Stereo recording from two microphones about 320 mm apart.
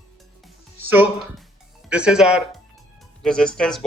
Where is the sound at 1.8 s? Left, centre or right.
Centre.